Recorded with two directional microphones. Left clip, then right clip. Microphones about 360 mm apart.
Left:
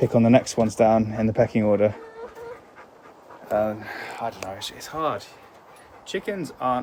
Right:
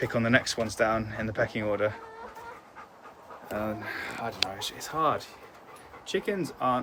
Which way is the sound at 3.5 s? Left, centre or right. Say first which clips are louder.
Left 9 dB; centre.